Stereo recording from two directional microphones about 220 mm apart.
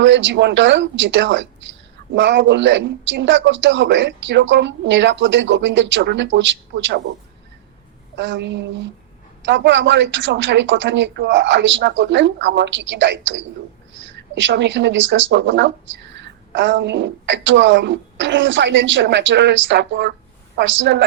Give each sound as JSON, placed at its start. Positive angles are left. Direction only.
{"t": 0.0, "sound": "speech", "side_deg": -55}
{"t": 8.1, "sound": "a woman's voice", "side_deg": -55}